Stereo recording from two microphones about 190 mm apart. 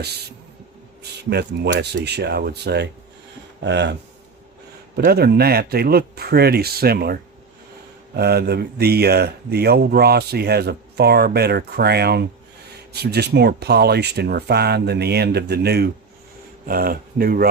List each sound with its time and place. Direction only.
1.3 s speech: 60° right (ahead or behind)
4.9 s speech: 55° right (ahead or behind)